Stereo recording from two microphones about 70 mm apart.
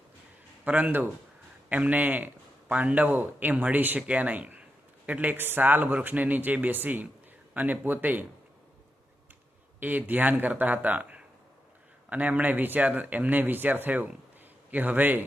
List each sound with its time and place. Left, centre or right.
0.6 s a man's voice: right
9.8 s a man's voice: right